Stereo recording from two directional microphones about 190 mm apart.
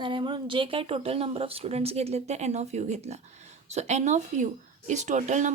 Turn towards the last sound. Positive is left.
turn(degrees=-40)  # may be behind; listen again after turning